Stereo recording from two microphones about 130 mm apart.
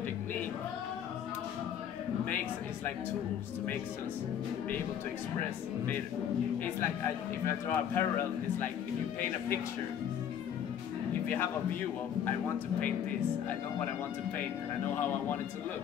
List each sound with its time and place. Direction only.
7.4 s speech: 20° left (ahead or behind)